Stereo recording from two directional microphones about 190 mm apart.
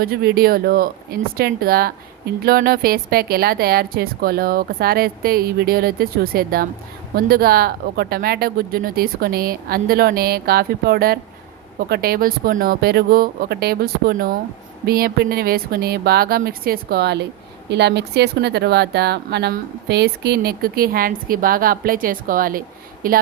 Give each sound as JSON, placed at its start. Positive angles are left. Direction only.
{"t": 0.0, "sound": "speech", "side_deg": -55}